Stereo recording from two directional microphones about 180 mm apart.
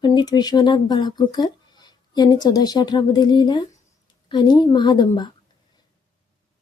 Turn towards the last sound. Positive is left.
turn(degrees=25)  # may be behind; listen again after turning